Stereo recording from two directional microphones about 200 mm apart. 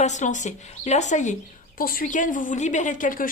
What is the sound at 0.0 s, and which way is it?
A woman's voice, 35° left (ahead or behind).